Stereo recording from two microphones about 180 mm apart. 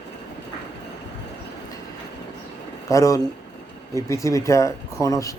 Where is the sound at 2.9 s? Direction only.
15° left (ahead or behind).